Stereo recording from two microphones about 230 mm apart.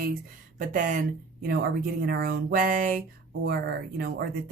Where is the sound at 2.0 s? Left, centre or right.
Right.